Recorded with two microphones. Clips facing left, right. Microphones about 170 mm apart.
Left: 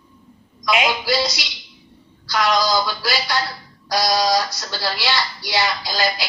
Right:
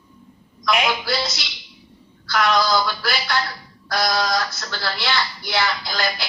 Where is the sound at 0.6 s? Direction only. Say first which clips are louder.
Left 1 dB; 15° left (ahead or behind).